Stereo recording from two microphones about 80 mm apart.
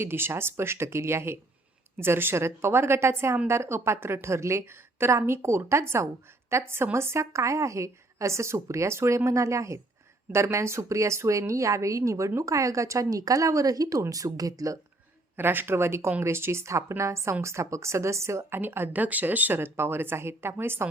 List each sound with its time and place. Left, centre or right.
0.0 s a woman's voice: right
15.4 s a woman's voice: right